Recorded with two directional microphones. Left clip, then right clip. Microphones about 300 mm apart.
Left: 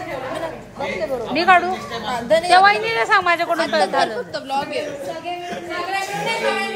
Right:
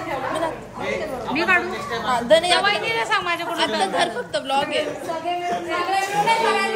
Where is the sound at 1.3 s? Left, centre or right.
Centre.